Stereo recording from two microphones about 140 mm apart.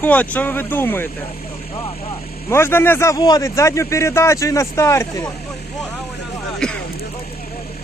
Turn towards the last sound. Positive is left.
turn(degrees=5)  # may be behind; listen again after turning